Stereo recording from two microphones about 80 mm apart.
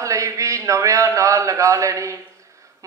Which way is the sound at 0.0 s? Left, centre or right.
Right.